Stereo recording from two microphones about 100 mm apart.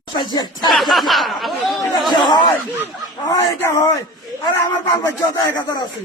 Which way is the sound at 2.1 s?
45° left (ahead or behind).